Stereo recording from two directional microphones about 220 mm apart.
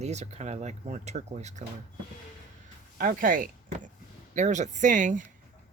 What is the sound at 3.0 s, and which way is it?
Speech, 40° right (ahead or behind).